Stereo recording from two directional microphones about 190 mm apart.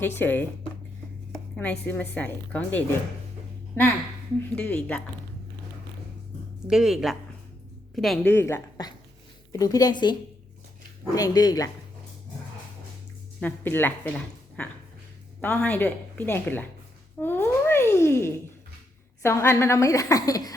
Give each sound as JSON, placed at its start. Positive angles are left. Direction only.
{"t": 0.0, "sound": "a woman's voice", "side_deg": 10}
{"t": 1.3, "sound": "a sound", "side_deg": 5}
{"t": 1.9, "sound": "a woman's voice", "side_deg": 10}
{"t": 4.5, "sound": "a woman's voice", "side_deg": 10}
{"t": 6.7, "sound": "a woman's voice", "side_deg": 0}
{"t": 13.4, "sound": "a woman's voice", "side_deg": 10}
{"t": 17.2, "sound": "a sound", "side_deg": 10}
{"t": 19.2, "sound": "a woman's voice", "side_deg": 15}